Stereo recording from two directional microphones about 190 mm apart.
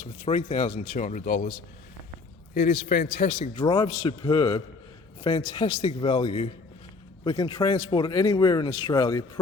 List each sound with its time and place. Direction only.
0.0 s speech: 35° left (ahead or behind)
2.6 s speech: 45° left (ahead or behind); by 9.4 s 20° left (ahead or behind)